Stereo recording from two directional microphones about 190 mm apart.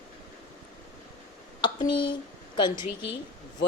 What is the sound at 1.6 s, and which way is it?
A woman's voice, 25° left (ahead or behind).